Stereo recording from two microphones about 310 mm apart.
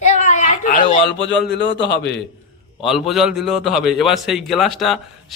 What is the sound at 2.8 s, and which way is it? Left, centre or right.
A man's voice, centre.